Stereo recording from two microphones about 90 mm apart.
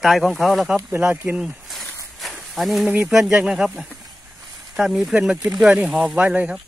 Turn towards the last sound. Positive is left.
turn(degrees=-15)  # may be behind; listen again after turning